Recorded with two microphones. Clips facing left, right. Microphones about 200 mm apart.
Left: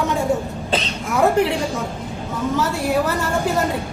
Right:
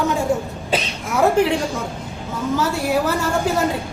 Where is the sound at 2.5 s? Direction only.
Centre (ahead or behind).